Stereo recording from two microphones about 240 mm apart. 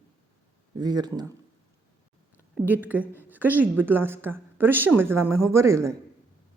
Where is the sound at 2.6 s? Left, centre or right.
Centre.